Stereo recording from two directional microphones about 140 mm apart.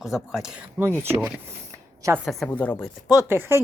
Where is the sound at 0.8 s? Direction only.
15° right (ahead or behind).